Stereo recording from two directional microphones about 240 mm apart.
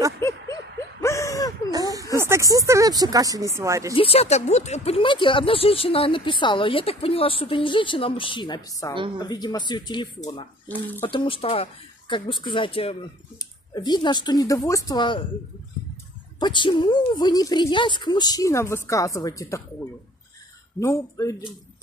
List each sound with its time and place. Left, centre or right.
0.2 s a sound: centre
1.7 s a sound: centre
2.1 s speech: centre
3.9 s a woman's voice: left
16.3 s a woman's voice: centre
20.8 s a woman's voice: centre